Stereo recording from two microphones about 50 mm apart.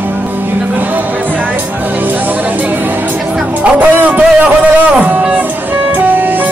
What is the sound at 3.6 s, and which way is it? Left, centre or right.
Music, right.